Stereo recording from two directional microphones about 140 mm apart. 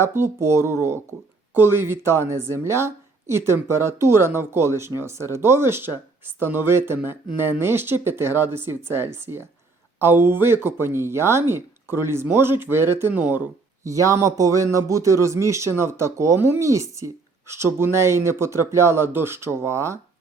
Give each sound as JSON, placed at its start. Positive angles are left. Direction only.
{"t": 0.0, "sound": "a woman's voice", "side_deg": -20}